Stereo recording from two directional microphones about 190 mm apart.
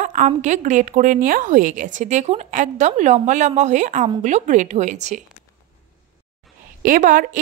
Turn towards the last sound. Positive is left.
turn(degrees=-45)  # may be behind; listen again after turning